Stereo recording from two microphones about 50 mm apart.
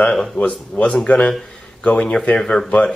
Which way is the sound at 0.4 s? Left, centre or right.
Left.